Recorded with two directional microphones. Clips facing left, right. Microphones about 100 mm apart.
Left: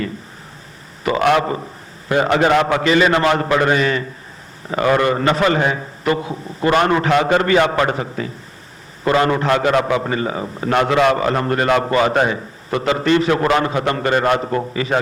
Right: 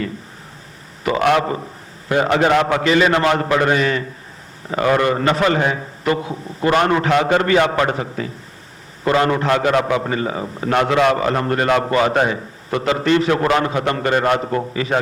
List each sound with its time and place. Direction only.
1.0 s a man's voice: 30° left (ahead or behind)